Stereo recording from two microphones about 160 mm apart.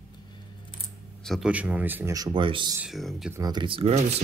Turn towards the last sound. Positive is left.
turn(degrees=-40)  # may be behind; listen again after turning